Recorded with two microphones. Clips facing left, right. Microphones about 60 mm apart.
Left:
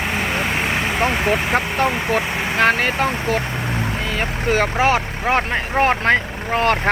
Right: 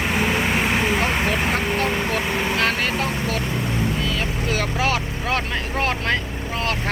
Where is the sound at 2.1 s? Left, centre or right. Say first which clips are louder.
Left 2 dB; left.